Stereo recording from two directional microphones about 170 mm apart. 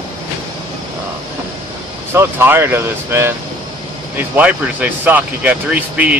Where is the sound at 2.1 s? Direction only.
15° right (ahead or behind).